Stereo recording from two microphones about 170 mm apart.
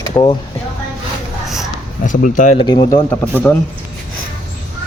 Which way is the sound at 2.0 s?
50° left (ahead or behind).